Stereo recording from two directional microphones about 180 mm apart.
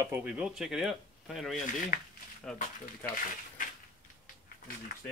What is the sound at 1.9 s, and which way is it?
Speech, 50° left (ahead or behind).